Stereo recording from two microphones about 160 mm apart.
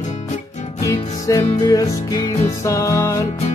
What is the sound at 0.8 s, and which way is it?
Music, 20° left (ahead or behind).